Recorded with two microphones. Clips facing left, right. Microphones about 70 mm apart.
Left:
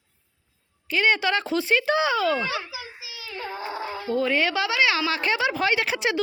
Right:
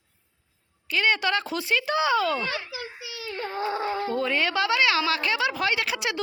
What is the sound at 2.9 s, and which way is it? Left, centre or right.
Child singing, right.